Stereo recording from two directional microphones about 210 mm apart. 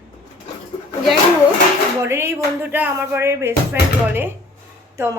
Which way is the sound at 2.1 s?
10° right (ahead or behind).